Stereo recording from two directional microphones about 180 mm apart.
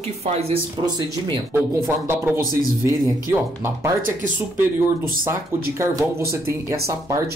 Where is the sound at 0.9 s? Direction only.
25° right (ahead or behind).